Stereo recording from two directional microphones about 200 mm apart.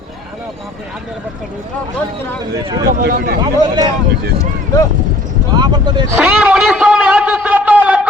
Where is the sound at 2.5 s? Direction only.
20° right (ahead or behind).